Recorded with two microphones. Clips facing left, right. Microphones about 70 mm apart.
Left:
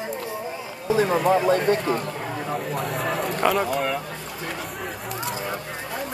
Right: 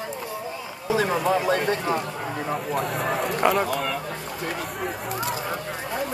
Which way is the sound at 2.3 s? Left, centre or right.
Right.